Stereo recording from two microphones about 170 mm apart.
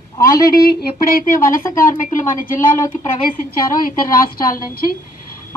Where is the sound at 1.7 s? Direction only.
55° left (ahead or behind).